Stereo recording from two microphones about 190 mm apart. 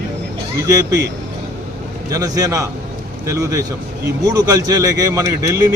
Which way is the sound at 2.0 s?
20° right (ahead or behind).